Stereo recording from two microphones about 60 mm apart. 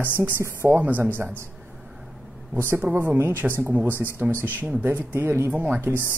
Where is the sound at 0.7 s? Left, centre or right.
Right.